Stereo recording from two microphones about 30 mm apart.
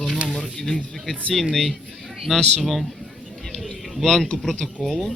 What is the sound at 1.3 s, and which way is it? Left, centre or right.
Speech, centre.